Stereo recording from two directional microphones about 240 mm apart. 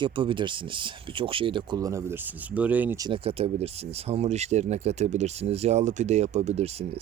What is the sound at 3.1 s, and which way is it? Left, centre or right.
A man's voice, right.